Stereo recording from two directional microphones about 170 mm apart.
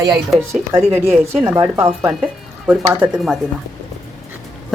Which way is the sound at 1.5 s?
15° right (ahead or behind).